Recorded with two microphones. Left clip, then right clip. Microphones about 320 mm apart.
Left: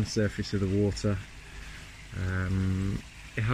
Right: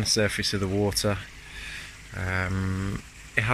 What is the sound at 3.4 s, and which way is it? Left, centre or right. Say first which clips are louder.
Speech: right 10 dB; centre.